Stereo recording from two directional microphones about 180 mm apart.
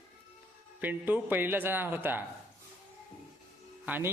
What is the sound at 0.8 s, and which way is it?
Speech, 10° right (ahead or behind).